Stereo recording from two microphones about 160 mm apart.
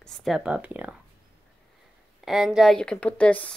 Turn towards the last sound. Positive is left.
turn(degrees=10)  # may be behind; listen again after turning